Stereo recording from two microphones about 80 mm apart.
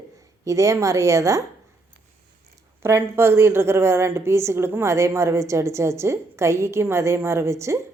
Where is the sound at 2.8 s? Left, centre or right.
Right.